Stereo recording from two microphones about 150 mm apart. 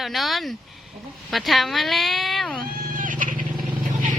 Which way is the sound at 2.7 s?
70° right (ahead or behind).